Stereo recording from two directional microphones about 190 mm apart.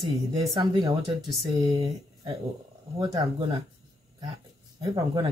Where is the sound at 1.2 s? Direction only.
Centre (ahead or behind).